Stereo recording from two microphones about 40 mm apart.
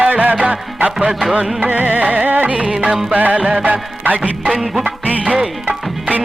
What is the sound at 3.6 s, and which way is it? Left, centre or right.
Music of bollywood, right.